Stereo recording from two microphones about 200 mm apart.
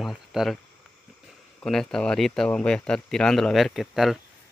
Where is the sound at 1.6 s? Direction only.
5° left (ahead or behind).